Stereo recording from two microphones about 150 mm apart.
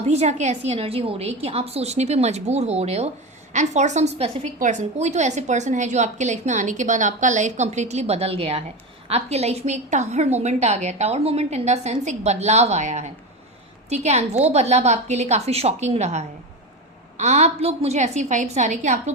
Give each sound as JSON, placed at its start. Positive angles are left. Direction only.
{"t": 0.1, "sound": "a woman's voice", "side_deg": -50}